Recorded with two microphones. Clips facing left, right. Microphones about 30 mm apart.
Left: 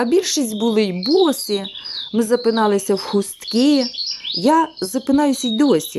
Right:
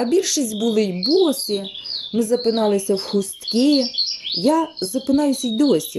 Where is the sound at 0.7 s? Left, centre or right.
Left.